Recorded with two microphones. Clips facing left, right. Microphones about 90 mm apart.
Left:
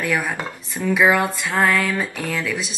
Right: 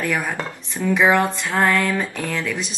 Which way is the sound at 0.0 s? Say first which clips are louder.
Even; centre (ahead or behind).